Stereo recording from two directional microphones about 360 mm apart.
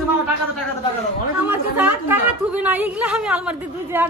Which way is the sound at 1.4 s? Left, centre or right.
Centre.